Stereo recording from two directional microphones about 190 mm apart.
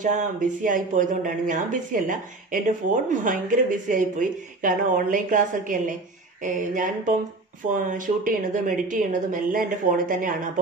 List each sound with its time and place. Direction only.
0.0 s speech: 40° right (ahead or behind)